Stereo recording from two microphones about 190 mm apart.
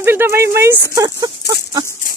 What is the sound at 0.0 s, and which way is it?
Speech, 10° right (ahead or behind).